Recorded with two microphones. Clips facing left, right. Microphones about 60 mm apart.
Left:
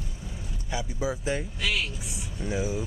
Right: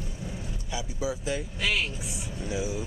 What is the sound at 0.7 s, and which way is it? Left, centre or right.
Speech, left.